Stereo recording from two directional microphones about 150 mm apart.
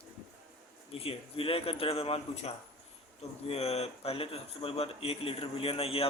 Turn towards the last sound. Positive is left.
turn(degrees=40)  # may be behind; listen again after turning